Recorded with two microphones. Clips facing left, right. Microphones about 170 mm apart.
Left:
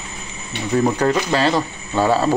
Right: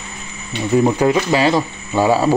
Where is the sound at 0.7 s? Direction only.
10° right (ahead or behind).